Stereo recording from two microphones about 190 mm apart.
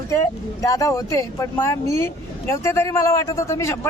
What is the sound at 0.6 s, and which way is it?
A man's voice, 15° left (ahead or behind).